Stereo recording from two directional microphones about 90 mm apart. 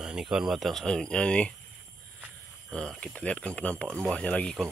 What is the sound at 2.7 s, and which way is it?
Speech, 5° left (ahead or behind).